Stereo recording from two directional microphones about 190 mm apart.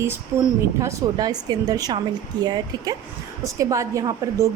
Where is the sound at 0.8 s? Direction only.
20° right (ahead or behind).